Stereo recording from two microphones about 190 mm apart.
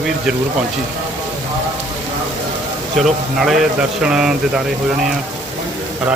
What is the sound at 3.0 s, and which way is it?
Speech, centre (ahead or behind).